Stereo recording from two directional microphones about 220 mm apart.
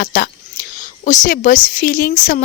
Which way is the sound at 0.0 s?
40° left (ahead or behind).